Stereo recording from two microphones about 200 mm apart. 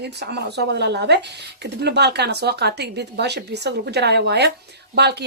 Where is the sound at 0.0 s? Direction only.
55° right (ahead or behind).